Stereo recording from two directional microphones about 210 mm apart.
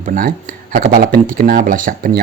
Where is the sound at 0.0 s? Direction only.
40° right (ahead or behind).